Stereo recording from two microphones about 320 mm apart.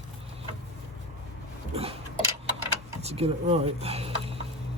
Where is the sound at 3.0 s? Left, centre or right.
Centre.